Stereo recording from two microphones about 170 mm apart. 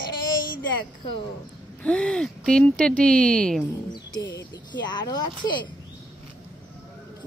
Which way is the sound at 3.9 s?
25° left (ahead or behind).